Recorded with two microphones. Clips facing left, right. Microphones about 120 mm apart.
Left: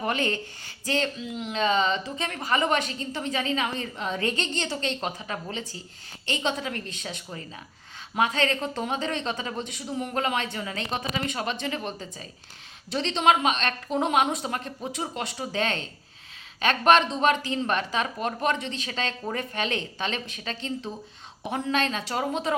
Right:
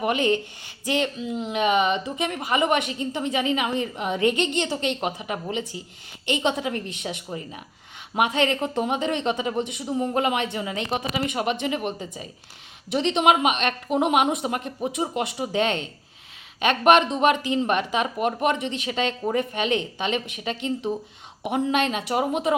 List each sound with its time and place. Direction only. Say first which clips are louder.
0.0 s a woman's voice: right 5 dB; 15° right (ahead or behind)
16.8 s a woman's voice: right 3 dB; 15° right (ahead or behind)